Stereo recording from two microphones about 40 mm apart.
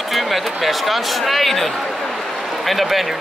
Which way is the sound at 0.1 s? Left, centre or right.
Centre.